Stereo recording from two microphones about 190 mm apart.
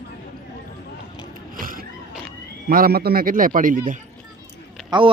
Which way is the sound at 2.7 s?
50° right (ahead or behind).